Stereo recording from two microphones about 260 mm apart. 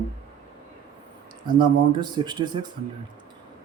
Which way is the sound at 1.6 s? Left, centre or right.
Centre.